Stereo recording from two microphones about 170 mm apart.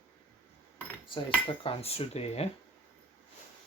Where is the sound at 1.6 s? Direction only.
35° left (ahead or behind).